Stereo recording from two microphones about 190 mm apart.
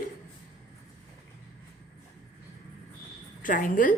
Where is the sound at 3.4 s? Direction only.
45° left (ahead or behind).